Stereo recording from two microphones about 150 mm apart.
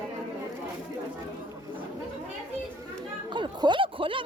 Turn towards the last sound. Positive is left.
turn(degrees=-35)  # may be behind; listen again after turning